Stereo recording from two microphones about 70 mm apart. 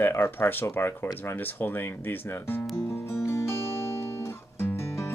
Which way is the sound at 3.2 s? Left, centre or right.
Left.